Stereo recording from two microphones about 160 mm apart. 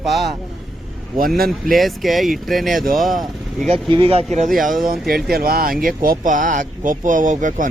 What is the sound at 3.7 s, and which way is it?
Speech, 35° right (ahead or behind).